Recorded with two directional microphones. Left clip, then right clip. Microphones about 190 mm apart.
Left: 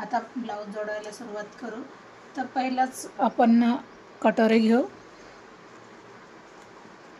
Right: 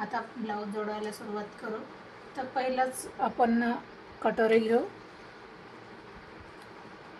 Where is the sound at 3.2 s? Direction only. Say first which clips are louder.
Left 6 dB; 65° left (ahead or behind).